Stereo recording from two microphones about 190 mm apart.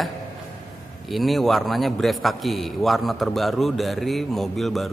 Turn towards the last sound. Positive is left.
turn(degrees=0)  # may be behind; listen again after turning